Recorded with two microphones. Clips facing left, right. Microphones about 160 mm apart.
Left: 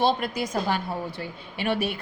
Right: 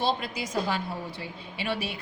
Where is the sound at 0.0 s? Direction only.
55° left (ahead or behind).